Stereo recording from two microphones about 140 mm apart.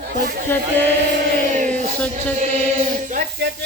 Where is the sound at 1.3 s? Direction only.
65° right (ahead or behind).